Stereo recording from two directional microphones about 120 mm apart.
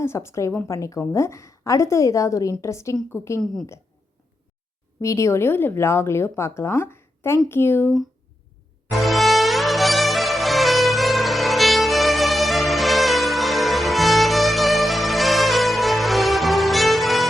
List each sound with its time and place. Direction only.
0.0 s speech: 20° left (ahead or behind)
4.9 s speech: 25° left (ahead or behind)
8.9 s music: centre (ahead or behind)